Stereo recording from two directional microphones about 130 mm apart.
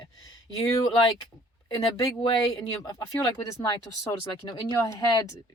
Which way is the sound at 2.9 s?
25° left (ahead or behind).